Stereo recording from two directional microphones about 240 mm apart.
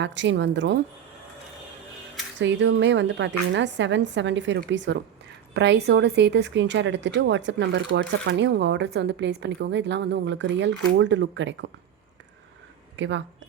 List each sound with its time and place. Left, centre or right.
0.0 s a woman's voice: right
2.4 s a woman's voice: right
13.0 s speech: right